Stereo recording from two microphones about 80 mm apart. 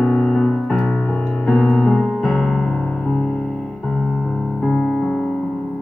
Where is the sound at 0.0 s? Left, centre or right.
Centre.